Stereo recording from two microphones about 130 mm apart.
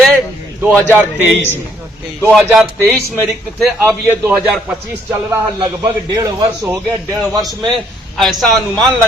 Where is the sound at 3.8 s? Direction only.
20° right (ahead or behind).